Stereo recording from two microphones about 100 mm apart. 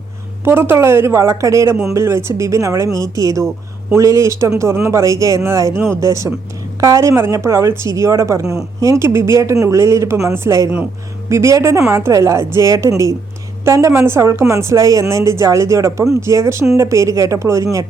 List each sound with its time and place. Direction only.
0.4 s a woman's voice: 25° right (ahead or behind)